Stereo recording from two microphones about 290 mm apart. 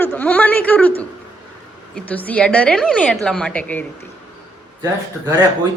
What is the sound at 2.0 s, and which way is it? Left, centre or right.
A woman's voice, centre.